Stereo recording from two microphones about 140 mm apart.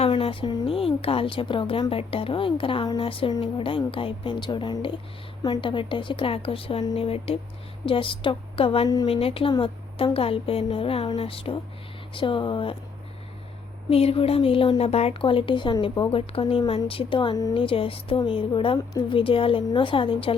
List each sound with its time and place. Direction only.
0.0 s a woman's voice: 40° left (ahead or behind)
13.9 s speech: 45° left (ahead or behind)